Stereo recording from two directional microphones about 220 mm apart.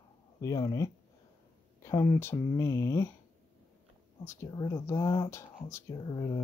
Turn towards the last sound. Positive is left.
turn(degrees=15)  # may be behind; listen again after turning